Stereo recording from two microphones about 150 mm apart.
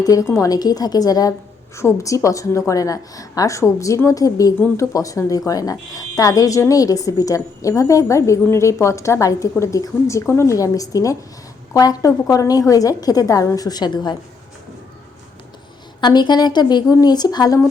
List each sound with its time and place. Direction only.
0.0 s a woman's voice: 20° left (ahead or behind)
16.0 s a woman's voice: 30° left (ahead or behind)